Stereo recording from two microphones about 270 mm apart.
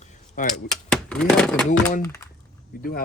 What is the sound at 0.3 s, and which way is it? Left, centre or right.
Speech, left.